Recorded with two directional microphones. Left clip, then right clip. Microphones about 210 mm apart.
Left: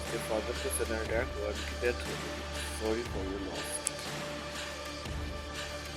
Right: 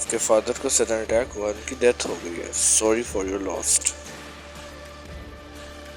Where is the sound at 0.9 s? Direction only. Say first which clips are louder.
Right 10 dB; 40° right (ahead or behind).